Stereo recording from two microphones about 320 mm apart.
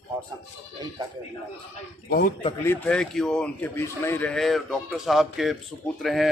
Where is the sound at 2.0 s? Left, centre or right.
Left.